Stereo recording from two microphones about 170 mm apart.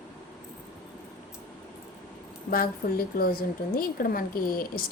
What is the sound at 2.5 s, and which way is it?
A woman's voice, 60° left (ahead or behind).